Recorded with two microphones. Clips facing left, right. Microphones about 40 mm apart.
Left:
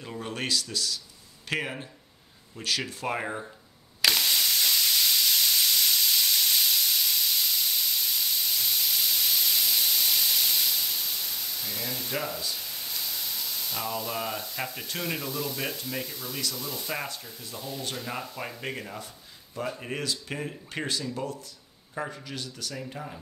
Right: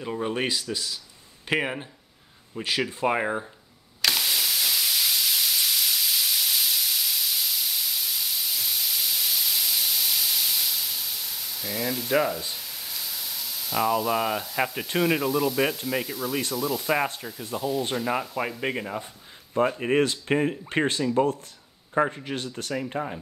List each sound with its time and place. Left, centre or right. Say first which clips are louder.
0.0 s speech: right 6 dB; centre
4.0 s a sound: even; centre
12.5 s spray: even; centre
15.0 s speech: right 10 dB; centre
18.6 s speech: right 6 dB; right
19.8 s speech: right 10 dB; right